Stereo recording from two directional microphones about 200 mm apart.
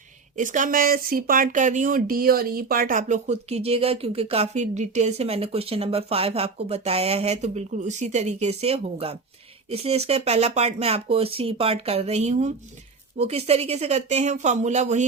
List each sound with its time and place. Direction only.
0.3 s speech: 40° right (ahead or behind)